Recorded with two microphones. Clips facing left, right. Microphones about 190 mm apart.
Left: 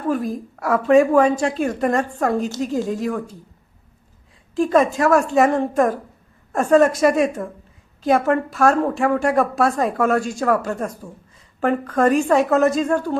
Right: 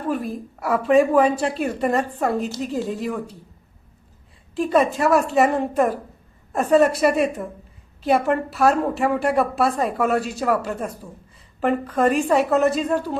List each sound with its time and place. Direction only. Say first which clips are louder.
0.6 s a woman's voice: left 2 dB; centre (ahead or behind)
4.5 s a woman's voice: left 2 dB; centre (ahead or behind)